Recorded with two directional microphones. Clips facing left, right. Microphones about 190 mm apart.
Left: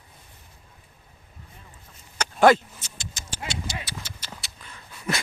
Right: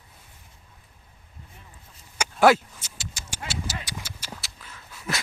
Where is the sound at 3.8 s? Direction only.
10° right (ahead or behind).